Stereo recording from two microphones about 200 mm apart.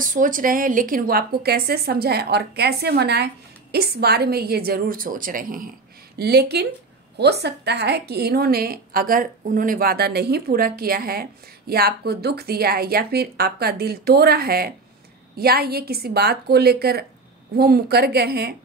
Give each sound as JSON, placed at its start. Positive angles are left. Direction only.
{"t": 0.0, "sound": "a woman's voice", "side_deg": -40}
{"t": 6.1, "sound": "a woman's voice", "side_deg": -55}